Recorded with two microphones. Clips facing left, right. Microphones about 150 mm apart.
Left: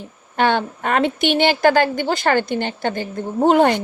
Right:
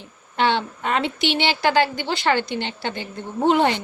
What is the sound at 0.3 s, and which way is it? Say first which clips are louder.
A woman's voice: left 3 dB; 50° left (ahead or behind).